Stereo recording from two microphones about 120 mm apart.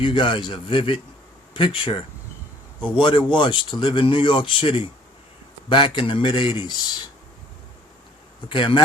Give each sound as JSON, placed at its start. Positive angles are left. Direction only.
{"t": 0.0, "sound": "a man's voice", "side_deg": 45}
{"t": 8.4, "sound": "speech", "side_deg": 45}